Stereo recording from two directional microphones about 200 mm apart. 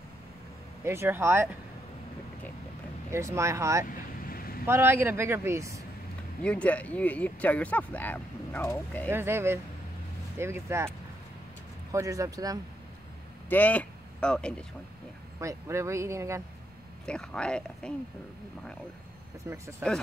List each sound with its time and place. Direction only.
0.8 s speech: 10° right (ahead or behind)
3.1 s speech: 15° right (ahead or behind)
3.8 s vehicle: 45° left (ahead or behind)
4.6 s speech: 10° right (ahead or behind)
6.4 s speech: 5° left (ahead or behind)
9.1 s speech: 10° right (ahead or behind)
11.9 s speech: 15° right (ahead or behind)
13.5 s speech: 10° left (ahead or behind)
15.4 s speech: 15° right (ahead or behind)
17.0 s speech: 5° left (ahead or behind)